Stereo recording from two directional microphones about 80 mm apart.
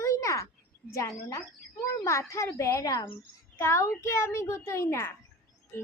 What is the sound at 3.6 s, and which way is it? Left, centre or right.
Child singing, left.